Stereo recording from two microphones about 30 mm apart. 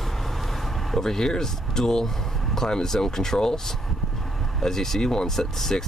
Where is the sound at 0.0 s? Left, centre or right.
Centre.